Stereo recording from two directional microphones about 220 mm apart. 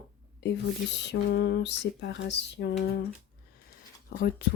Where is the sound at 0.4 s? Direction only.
50° left (ahead or behind).